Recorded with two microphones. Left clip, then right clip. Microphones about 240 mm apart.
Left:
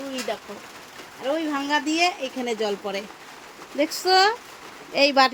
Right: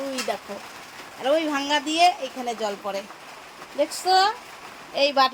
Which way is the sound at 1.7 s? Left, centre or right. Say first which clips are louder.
Right 3 dB; centre.